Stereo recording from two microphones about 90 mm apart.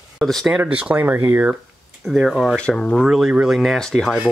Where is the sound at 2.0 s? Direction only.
Centre (ahead or behind).